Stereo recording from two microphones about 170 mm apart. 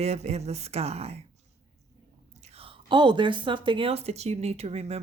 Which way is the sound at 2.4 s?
35° right (ahead or behind).